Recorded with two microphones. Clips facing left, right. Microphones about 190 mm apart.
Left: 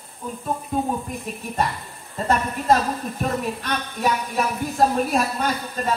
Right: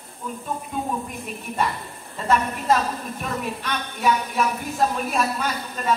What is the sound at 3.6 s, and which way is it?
A woman's voice, 35° left (ahead or behind).